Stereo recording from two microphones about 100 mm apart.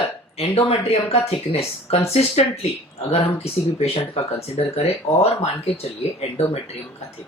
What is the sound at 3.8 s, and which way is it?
Speech, 90° left.